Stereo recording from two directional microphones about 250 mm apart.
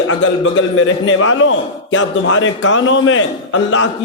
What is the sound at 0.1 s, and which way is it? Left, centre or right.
A man's voice, left.